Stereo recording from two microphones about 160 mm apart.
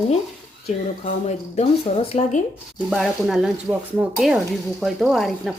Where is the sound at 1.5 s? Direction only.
40° left (ahead or behind).